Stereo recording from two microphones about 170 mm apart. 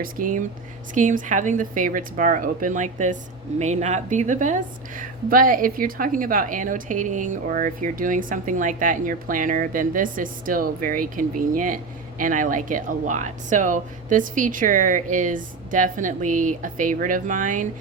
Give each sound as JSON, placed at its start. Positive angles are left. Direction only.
{"t": 0.0, "sound": "a woman's voice", "side_deg": -50}